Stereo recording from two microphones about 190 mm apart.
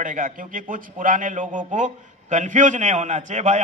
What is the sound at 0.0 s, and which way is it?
A man's voice, 45° right (ahead or behind).